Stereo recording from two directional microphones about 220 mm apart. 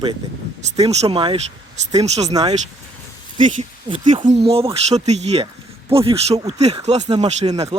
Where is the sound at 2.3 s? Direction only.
15° right (ahead or behind).